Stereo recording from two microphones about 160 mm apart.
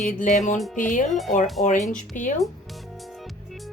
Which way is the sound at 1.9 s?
55° left (ahead or behind).